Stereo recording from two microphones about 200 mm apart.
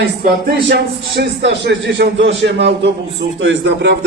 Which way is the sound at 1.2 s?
60° right (ahead or behind).